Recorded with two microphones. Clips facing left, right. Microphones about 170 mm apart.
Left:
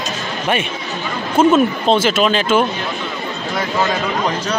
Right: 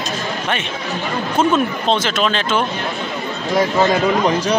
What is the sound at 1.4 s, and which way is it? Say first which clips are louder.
Speech: left 5 dB; 5° left (ahead or behind).